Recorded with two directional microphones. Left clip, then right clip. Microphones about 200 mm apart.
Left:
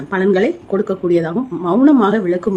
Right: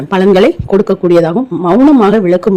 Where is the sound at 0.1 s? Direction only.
40° right (ahead or behind).